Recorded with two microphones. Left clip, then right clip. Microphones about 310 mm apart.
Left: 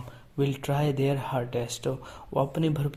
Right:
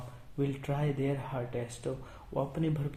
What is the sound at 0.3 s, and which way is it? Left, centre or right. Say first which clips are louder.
Speech: left 6 dB; left.